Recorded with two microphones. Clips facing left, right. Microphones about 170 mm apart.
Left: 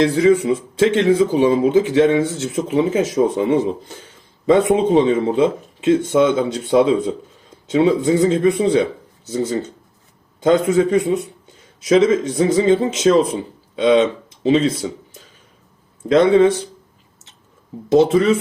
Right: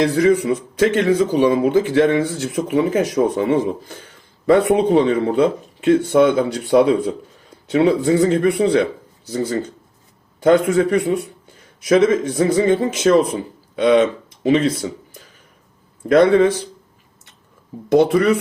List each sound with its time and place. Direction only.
0.1 s speech: 25° left (ahead or behind)
4.0 s a sound: 20° left (ahead or behind)
4.7 s speech: 20° left (ahead or behind)
10.4 s speech: 20° left (ahead or behind)
16.0 s speech: 20° left (ahead or behind)
18.1 s speech: 25° left (ahead or behind)